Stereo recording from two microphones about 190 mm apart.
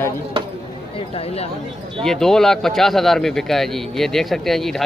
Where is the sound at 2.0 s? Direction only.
Centre (ahead or behind).